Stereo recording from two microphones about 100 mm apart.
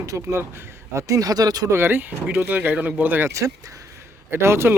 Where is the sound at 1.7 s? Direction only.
20° right (ahead or behind).